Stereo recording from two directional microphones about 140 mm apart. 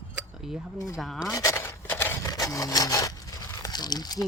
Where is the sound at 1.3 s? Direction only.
25° left (ahead or behind).